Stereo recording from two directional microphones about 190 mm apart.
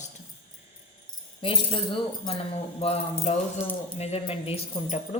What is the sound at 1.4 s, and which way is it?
A woman's voice, 25° left (ahead or behind).